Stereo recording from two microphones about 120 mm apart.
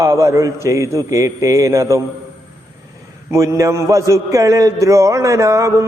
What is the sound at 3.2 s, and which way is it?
A man's voice, 25° right (ahead or behind).